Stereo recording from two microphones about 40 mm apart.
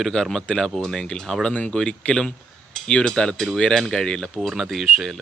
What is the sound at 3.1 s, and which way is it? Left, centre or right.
Speech, centre.